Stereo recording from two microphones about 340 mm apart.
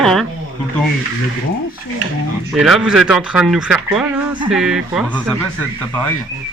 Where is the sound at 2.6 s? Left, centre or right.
Centre.